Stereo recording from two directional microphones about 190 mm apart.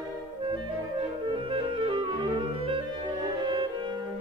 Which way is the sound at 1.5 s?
25° right (ahead or behind).